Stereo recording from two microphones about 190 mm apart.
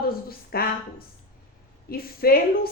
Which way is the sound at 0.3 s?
55° left (ahead or behind).